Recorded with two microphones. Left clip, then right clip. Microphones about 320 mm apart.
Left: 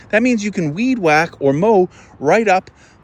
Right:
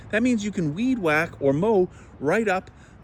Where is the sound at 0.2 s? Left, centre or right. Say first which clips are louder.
Left 6 dB; centre.